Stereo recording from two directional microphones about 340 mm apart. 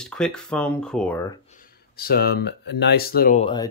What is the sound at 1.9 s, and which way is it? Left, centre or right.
Speech, left.